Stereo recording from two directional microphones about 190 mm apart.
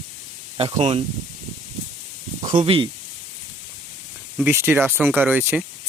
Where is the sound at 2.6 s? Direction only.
30° right (ahead or behind).